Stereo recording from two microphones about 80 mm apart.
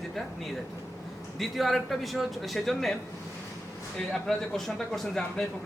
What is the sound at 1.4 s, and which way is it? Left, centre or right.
Speech, centre.